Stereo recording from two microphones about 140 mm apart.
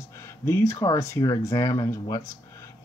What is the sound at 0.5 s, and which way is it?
Speech, 20° left (ahead or behind).